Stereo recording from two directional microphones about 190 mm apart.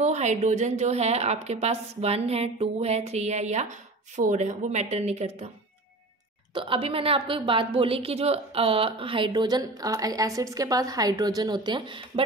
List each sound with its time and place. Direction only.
0.0 s a woman's voice: 35° right (ahead or behind)
6.5 s a woman's voice: 25° right (ahead or behind)